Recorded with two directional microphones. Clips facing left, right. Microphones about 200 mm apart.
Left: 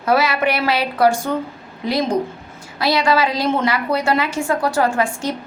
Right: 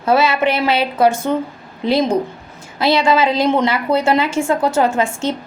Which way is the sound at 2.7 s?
25° right (ahead or behind).